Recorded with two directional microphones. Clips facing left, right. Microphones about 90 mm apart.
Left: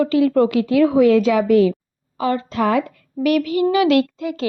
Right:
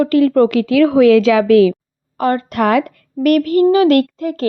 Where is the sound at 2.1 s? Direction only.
55° right (ahead or behind).